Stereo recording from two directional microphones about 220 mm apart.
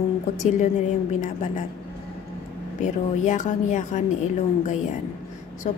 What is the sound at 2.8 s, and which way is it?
A woman's voice, 35° left (ahead or behind).